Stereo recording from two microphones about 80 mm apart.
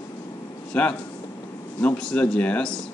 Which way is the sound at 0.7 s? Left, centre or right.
Centre.